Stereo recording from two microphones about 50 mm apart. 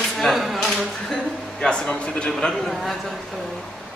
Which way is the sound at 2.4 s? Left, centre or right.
Centre.